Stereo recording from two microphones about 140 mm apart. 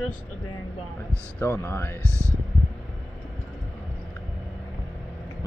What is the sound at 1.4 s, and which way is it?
Speech, 15° left (ahead or behind).